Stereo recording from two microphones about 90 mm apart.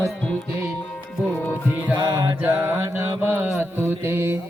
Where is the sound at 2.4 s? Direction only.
25° right (ahead or behind).